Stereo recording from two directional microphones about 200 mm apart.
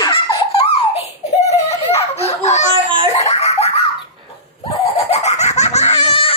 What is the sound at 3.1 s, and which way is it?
Baby laughter, 35° left (ahead or behind).